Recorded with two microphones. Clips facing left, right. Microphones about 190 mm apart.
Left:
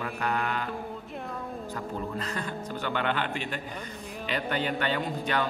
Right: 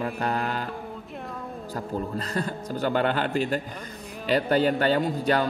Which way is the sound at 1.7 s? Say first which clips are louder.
Right 5 dB; 35° right (ahead or behind).